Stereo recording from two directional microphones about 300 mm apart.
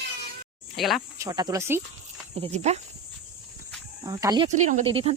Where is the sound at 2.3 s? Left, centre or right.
Centre.